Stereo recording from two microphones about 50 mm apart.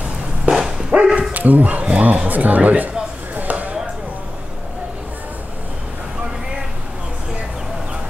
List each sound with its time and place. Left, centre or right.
0.5 s dog: centre
0.9 s speech: right
1.3 s speech: right
3.3 s a sound: right